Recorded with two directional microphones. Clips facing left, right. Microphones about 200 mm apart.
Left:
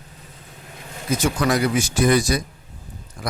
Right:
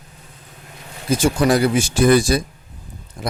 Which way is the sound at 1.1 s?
30° right (ahead or behind).